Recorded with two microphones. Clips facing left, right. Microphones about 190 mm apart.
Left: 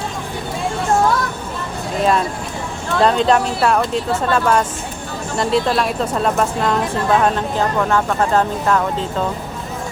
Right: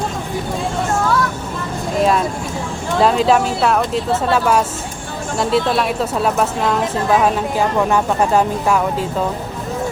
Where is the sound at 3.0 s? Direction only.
5° right (ahead or behind).